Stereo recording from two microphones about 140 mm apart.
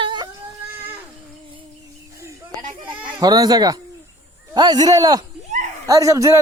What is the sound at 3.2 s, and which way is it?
A man's voice, 30° right (ahead or behind).